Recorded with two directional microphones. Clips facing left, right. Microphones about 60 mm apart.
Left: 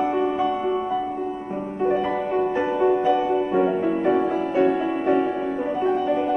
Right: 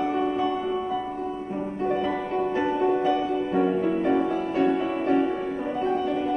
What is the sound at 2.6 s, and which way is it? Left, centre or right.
Music, centre.